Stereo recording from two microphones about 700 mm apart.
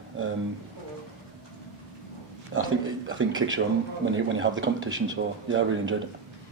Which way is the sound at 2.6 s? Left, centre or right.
Centre.